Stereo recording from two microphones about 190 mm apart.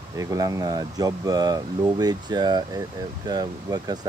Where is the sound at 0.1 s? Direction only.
15° right (ahead or behind).